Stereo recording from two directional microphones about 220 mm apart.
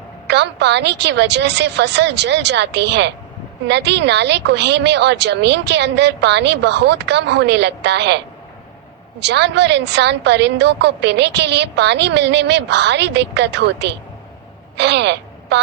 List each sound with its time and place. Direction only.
0.3 s a woman's voice: 50° right (ahead or behind)
9.2 s a woman's voice: 50° right (ahead or behind)